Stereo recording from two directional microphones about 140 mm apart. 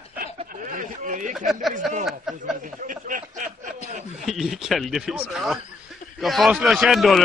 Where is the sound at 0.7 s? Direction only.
70° right (ahead or behind).